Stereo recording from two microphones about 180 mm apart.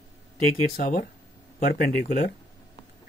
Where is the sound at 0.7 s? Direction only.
45° left (ahead or behind).